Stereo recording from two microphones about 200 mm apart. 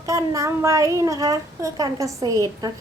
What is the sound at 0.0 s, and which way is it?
A child's voice, 15° right (ahead or behind).